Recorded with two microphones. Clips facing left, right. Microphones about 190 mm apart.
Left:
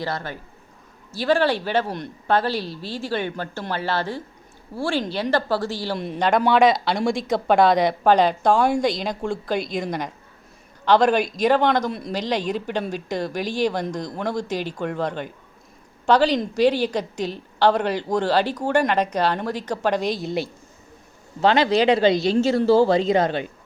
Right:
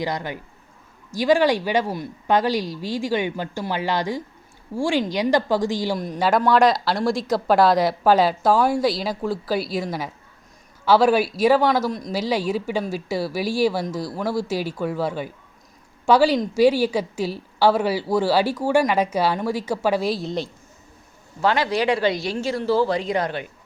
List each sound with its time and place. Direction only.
0.0 s speech: 15° right (ahead or behind)
6.0 s speech: centre (ahead or behind)
12.1 s speech: 5° right (ahead or behind)
21.4 s speech: 25° left (ahead or behind)